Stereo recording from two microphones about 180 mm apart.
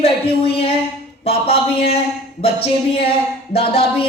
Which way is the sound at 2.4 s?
35° left (ahead or behind).